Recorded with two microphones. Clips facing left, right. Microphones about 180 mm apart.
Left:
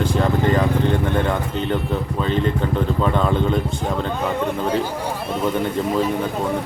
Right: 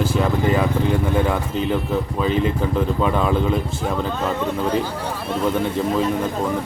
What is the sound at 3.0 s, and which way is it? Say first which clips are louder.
Speech: left 1 dB; 5° right (ahead or behind).